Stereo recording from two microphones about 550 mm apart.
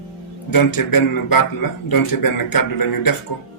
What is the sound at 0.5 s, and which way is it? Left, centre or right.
A man's voice, left.